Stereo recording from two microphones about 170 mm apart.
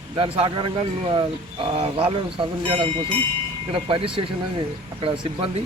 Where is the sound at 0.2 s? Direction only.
25° right (ahead or behind).